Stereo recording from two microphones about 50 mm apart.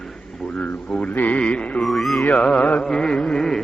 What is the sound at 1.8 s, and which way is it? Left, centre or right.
Music, centre.